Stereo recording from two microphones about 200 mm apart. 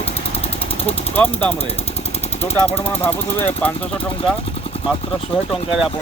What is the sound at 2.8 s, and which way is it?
Speech, 10° left (ahead or behind).